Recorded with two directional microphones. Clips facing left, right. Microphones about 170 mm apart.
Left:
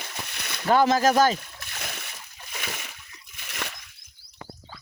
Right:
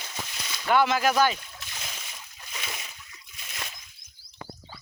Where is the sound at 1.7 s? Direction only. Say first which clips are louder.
Left 5 dB; 60° left (ahead or behind).